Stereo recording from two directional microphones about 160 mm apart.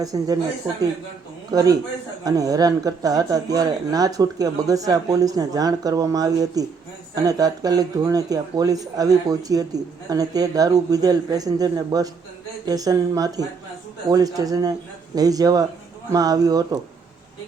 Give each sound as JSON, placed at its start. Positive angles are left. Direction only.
{"t": 0.0, "sound": "speech", "side_deg": -20}
{"t": 1.5, "sound": "speech", "side_deg": -25}